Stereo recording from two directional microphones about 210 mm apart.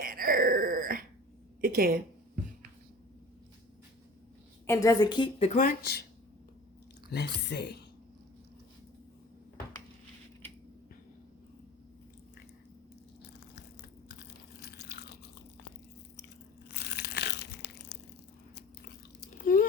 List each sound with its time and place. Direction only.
0.0 s a sound: 45° right (ahead or behind)
1.6 s a woman's voice: 45° right (ahead or behind)
4.6 s a woman's voice: 15° left (ahead or behind)
5.5 s a woman's voice: 45° left (ahead or behind)
7.1 s a woman's voice: 55° left (ahead or behind)
14.6 s biting: 50° left (ahead or behind)
16.8 s crushing: 50° left (ahead or behind)
19.5 s a sound: 40° left (ahead or behind)